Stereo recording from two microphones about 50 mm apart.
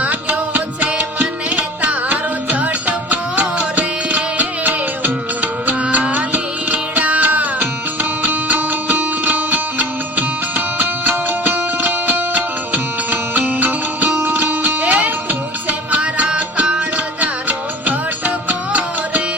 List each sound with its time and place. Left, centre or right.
0.0 s music: right
18.4 s music: right